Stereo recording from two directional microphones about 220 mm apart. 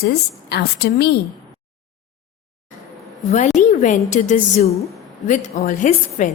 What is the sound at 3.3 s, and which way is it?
A woman's voice, 35° left (ahead or behind).